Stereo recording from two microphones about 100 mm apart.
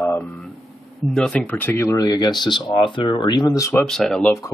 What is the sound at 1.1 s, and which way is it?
Speech, 10° left (ahead or behind).